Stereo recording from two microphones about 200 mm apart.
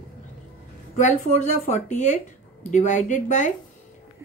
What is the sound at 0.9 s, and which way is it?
Speech, 35° left (ahead or behind).